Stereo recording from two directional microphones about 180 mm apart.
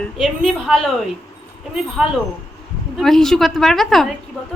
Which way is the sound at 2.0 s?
Centre (ahead or behind).